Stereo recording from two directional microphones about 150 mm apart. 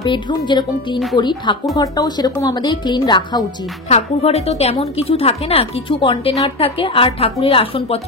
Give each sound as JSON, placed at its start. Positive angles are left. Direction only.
{"t": 0.0, "sound": "a woman's voice", "side_deg": 30}
{"t": 3.9, "sound": "a woman's voice", "side_deg": 45}